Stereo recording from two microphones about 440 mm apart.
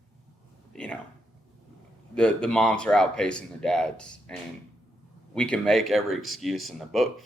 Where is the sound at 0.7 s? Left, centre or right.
Centre.